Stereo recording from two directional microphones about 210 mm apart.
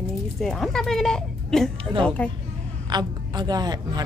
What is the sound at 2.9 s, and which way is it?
A woman's voice, 20° right (ahead or behind).